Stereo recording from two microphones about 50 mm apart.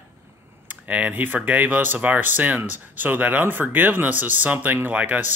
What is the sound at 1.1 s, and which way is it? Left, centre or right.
Speech, right.